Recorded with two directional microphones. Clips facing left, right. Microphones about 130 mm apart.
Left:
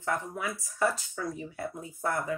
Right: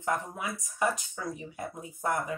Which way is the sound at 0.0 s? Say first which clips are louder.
Even; 20° right (ahead or behind).